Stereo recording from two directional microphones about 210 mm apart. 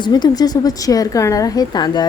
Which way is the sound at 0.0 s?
20° left (ahead or behind).